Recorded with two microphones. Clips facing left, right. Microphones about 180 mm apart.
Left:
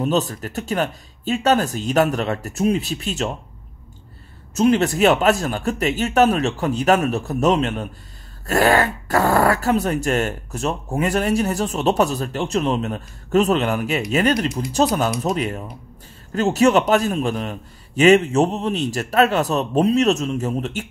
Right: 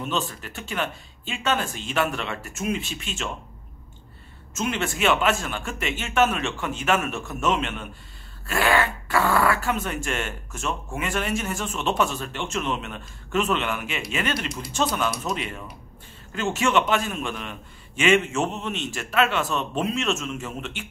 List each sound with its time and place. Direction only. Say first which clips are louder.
0.0 s speech: left 8 dB; 40° left (ahead or behind)
4.6 s speech: left 10 dB; 40° left (ahead or behind)